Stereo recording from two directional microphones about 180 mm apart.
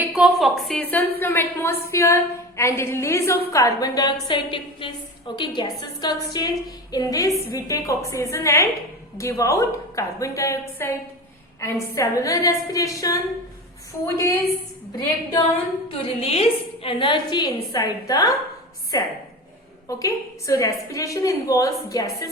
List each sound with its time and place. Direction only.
0.1 s a woman's voice: centre (ahead or behind)
15.9 s a woman's voice: 35° left (ahead or behind)